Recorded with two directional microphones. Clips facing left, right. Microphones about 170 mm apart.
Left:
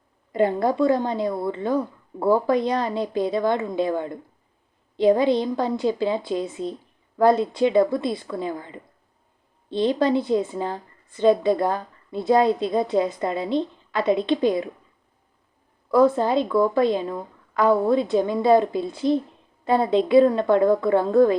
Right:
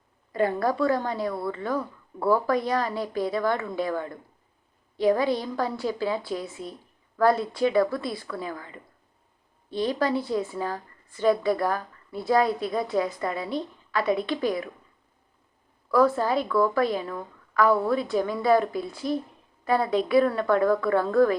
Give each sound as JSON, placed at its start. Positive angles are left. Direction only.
{"t": 0.3, "sound": "a woman's voice", "side_deg": 20}
{"t": 15.9, "sound": "a woman's voice", "side_deg": 20}